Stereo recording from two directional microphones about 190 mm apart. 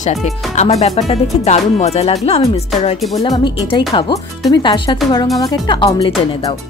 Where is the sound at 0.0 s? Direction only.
35° left (ahead or behind).